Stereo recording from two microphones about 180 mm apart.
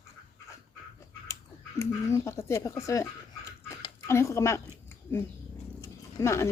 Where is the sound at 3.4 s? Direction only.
15° left (ahead or behind).